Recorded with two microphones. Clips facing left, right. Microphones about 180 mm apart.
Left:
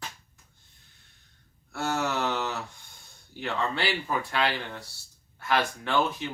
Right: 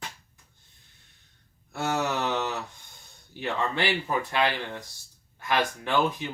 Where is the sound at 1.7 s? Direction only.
15° right (ahead or behind).